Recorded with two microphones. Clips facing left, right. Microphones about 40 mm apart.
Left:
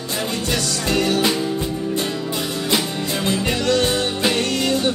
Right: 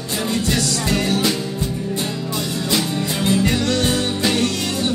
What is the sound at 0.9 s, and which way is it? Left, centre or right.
Music, right.